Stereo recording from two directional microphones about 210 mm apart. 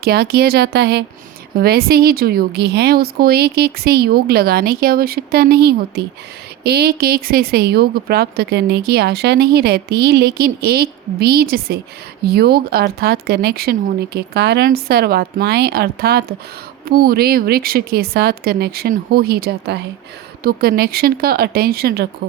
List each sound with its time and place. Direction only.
0.0 s speech: 50° right (ahead or behind)